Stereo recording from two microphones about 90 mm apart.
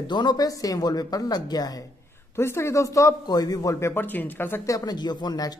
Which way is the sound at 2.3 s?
30° left (ahead or behind).